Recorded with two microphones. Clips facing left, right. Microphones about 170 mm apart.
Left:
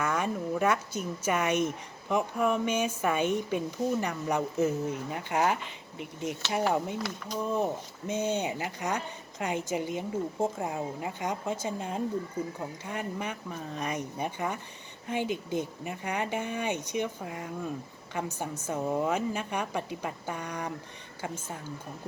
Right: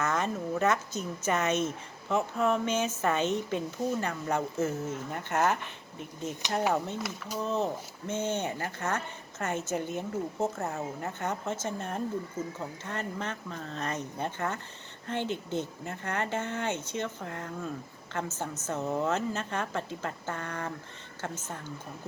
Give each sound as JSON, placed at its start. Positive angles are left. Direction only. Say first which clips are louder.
{"t": 0.0, "sound": "a woman's voice", "louder": "even", "side_deg": 10}
{"t": 6.4, "sound": "speech", "louder": "even", "side_deg": -15}
{"t": 7.3, "sound": "a woman's voice", "louder": "left 1 dB", "side_deg": 10}